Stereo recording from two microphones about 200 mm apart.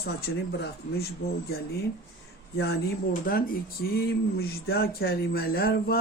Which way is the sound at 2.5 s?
55° left (ahead or behind).